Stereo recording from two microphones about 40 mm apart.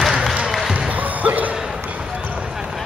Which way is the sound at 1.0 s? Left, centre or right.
Right.